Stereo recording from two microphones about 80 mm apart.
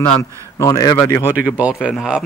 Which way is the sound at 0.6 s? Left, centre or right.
Left.